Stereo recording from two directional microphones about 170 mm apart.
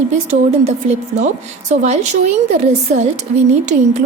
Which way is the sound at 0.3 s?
40° right (ahead or behind).